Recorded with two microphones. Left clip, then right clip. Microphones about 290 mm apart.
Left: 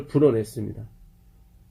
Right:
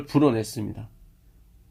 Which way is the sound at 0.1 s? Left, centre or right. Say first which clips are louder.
Left 2 dB; right.